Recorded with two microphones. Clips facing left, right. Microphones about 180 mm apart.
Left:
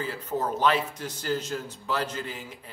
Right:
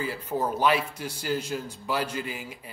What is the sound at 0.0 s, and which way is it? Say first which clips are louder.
A man's voice: right 1 dB; 10° right (ahead or behind).